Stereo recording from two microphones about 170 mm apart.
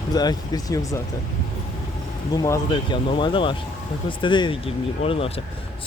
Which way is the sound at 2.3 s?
20° left (ahead or behind).